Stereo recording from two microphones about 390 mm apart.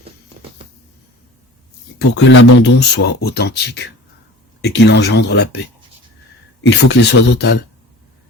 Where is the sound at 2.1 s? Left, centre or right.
Left.